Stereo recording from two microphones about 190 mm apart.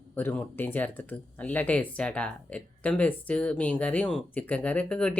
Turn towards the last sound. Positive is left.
turn(degrees=5)  # may be behind; listen again after turning